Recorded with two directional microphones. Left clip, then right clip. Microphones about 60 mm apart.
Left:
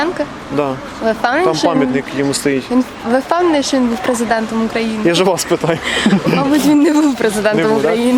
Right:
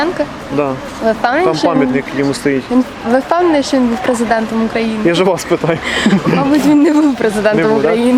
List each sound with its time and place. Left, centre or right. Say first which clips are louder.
1.0 s speech: right 1 dB; centre
1.7 s speech: right 2 dB; left
2.7 s speech: right 2 dB; centre
5.0 s speech: even; left
5.9 s speech: right 1 dB; centre
6.2 s speech: right 2 dB; left